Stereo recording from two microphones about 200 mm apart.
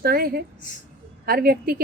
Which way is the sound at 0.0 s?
50° right (ahead or behind).